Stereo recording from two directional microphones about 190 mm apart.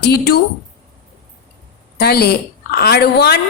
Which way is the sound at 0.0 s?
55° left (ahead or behind).